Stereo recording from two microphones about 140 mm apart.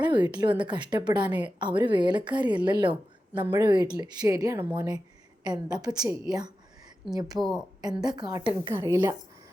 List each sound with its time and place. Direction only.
0.0 s a woman's voice: 30° right (ahead or behind)
7.3 s a woman's voice: centre (ahead or behind)
7.8 s a woman's voice: 30° right (ahead or behind)